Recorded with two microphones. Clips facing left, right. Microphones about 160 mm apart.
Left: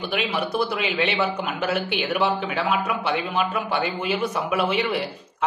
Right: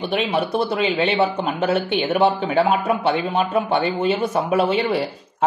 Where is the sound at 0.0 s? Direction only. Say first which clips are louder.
Right 5 dB; 35° right (ahead or behind).